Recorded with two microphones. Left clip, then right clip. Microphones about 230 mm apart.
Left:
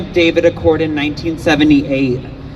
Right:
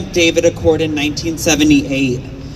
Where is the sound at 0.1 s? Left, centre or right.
Right.